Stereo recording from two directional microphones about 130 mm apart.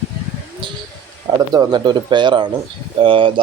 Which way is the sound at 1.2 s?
30° right (ahead or behind).